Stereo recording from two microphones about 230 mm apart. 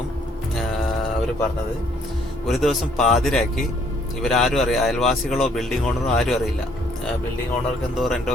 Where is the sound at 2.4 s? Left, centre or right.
Centre.